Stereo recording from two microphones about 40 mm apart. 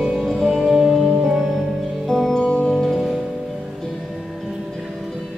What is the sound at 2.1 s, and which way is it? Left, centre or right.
Music, centre.